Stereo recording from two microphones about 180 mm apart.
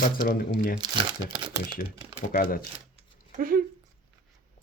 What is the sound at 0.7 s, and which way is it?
Speech, 25° right (ahead or behind).